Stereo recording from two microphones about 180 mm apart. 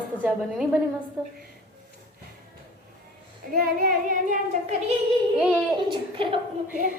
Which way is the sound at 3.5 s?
50° right (ahead or behind).